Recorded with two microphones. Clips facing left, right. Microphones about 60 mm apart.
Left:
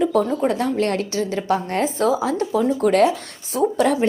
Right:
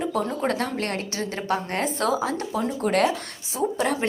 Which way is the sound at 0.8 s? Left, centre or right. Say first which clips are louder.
Left 7 dB; right.